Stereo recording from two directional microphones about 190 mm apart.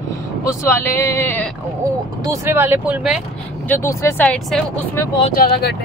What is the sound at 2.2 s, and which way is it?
Speech, 15° right (ahead or behind).